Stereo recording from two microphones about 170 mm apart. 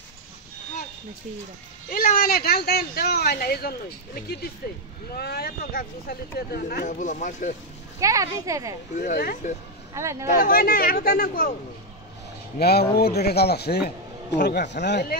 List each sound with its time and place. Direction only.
1.9 s speech: 55° left (ahead or behind)
8.0 s speech: 20° right (ahead or behind)
8.9 s speech: 50° left (ahead or behind)
9.9 s speech: 15° right (ahead or behind)
10.2 s speech: 55° left (ahead or behind)
12.5 s a man's voice: 70° left (ahead or behind)
14.4 s speech: 85° left